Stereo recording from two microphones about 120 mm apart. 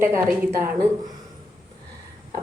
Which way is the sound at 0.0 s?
20° right (ahead or behind).